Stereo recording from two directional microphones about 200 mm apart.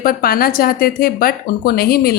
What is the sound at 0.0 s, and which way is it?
A woman's voice, 45° left (ahead or behind).